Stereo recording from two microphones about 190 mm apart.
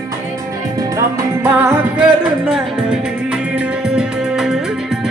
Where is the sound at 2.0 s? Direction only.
5° right (ahead or behind).